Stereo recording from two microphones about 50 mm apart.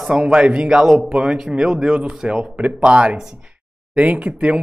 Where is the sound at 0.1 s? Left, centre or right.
Centre.